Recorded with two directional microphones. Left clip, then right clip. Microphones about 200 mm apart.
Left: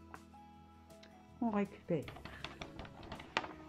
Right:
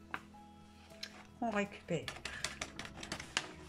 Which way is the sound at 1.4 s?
20° left (ahead or behind).